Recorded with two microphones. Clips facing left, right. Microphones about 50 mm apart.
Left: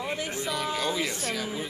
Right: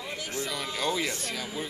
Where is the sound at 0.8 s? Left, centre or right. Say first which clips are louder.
Left 1 dB; centre.